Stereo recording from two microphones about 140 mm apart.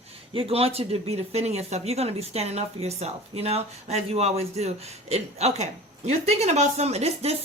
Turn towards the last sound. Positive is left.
turn(degrees=-50)  # may be behind; listen again after turning